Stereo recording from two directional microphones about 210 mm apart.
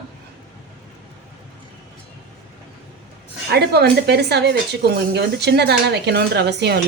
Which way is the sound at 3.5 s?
50° right (ahead or behind).